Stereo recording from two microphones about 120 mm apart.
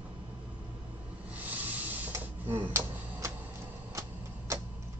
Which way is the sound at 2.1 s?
20° right (ahead or behind).